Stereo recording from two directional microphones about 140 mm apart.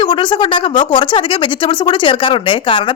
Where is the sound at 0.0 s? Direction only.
35° left (ahead or behind).